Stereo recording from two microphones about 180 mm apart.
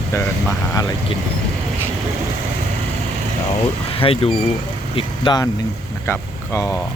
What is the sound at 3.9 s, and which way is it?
Speech, 30° left (ahead or behind).